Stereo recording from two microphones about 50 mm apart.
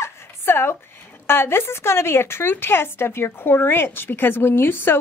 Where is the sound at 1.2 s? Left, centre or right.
Left.